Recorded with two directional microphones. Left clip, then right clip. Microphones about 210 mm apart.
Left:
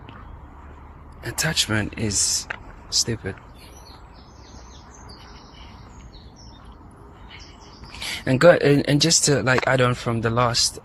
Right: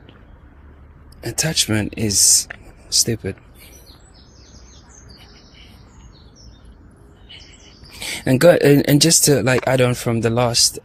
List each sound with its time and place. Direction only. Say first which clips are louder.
1.2 s speech: right 3 dB; 55° right (ahead or behind)
7.9 s speech: right 4 dB; 55° right (ahead or behind)